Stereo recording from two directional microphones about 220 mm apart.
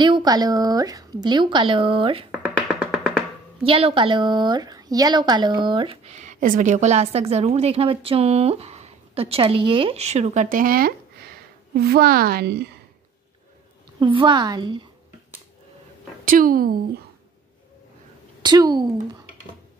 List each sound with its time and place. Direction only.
0.0 s speech: 20° right (ahead or behind)
2.3 s music: 5° right (ahead or behind)
3.6 s a woman's voice: 25° right (ahead or behind); by 12.8 s 50° right (ahead or behind)
13.9 s speech: 20° right (ahead or behind)
16.3 s speech: 40° right (ahead or behind)
18.4 s speech: 20° right (ahead or behind)